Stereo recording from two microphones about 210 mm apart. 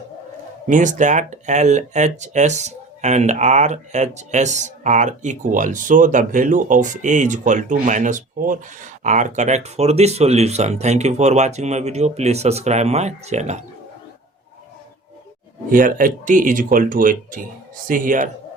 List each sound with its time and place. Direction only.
0.7 s speech: 35° right (ahead or behind)
15.7 s speech: 40° right (ahead or behind)